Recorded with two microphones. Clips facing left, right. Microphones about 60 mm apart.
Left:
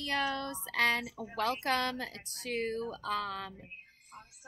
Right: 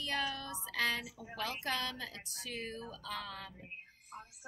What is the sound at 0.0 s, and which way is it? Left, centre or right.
A woman's voice, left.